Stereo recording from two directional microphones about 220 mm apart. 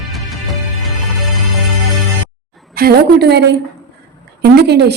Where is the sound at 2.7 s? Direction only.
45° right (ahead or behind).